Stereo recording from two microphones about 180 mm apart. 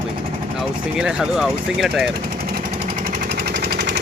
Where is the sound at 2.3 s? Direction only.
50° right (ahead or behind).